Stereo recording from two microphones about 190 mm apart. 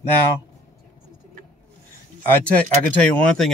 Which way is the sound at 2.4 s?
5° left (ahead or behind).